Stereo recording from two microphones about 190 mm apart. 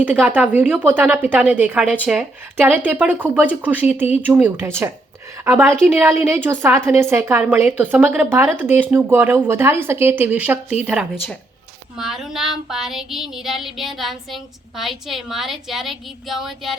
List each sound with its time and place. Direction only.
0.0 s a woman's voice: 10° right (ahead or behind)
10.8 s child singing: 5° right (ahead or behind)